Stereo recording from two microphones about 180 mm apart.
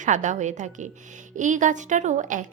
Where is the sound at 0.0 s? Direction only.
40° right (ahead or behind).